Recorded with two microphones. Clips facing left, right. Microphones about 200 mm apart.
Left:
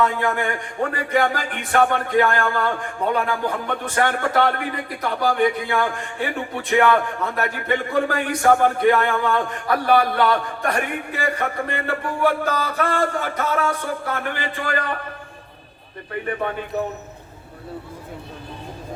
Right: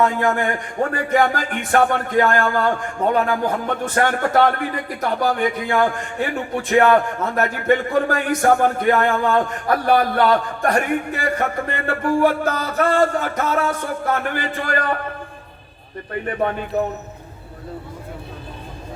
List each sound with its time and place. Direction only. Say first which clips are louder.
0.0 s music: right 3 dB; 45° right (ahead or behind)